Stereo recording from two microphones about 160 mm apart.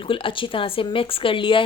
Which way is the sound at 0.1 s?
35° left (ahead or behind).